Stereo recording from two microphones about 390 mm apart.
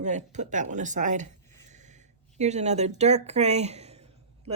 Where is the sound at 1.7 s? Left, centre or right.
Centre.